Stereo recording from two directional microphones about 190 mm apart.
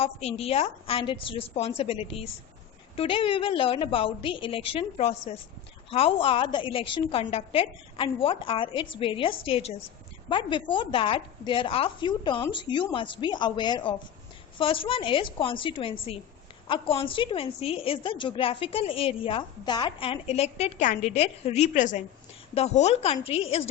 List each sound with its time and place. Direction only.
0.0 s a woman's voice: 30° left (ahead or behind)